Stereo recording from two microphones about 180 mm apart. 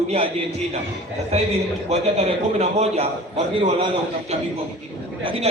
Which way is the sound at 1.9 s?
35° right (ahead or behind).